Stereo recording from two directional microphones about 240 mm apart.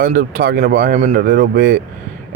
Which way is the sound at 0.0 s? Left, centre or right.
Right.